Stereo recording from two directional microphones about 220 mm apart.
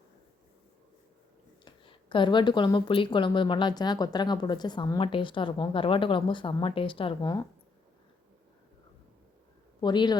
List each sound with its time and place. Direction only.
1.6 s speech: 20° left (ahead or behind)
9.8 s speech: 20° left (ahead or behind)